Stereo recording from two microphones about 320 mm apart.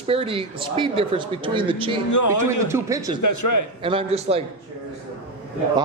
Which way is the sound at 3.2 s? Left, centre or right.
Left.